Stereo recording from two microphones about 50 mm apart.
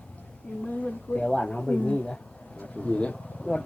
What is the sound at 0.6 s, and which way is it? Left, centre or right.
A woman's voice, left.